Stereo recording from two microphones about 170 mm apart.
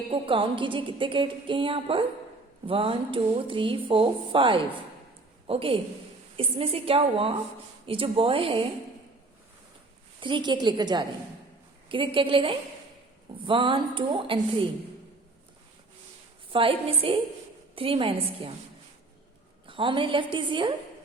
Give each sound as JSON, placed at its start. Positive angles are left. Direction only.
{"t": 0.1, "sound": "speech", "side_deg": -30}
{"t": 10.2, "sound": "a woman's voice", "side_deg": -30}
{"t": 16.5, "sound": "speech", "side_deg": -30}
{"t": 19.6, "sound": "a woman's voice", "side_deg": -30}